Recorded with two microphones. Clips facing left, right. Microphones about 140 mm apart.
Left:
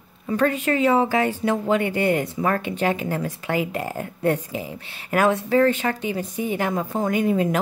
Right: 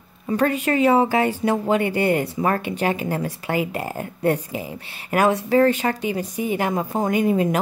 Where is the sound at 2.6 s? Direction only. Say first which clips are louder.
Even; 5° right (ahead or behind).